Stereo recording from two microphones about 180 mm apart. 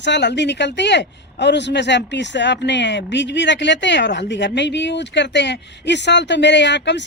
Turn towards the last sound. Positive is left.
turn(degrees=75)  # may be behind; listen again after turning